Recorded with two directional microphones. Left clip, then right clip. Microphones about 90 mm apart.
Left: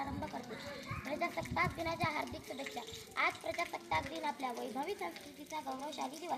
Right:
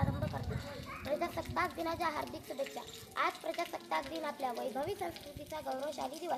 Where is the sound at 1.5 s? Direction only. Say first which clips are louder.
Right 1 dB; 40° right (ahead or behind).